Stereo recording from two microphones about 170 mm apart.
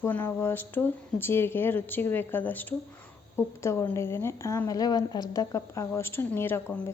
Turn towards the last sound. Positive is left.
turn(degrees=15)  # may be behind; listen again after turning